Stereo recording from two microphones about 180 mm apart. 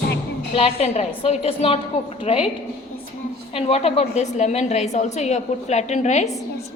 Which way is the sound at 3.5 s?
35° left (ahead or behind).